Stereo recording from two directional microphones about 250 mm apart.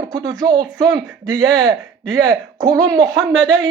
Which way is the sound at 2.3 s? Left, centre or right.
Centre.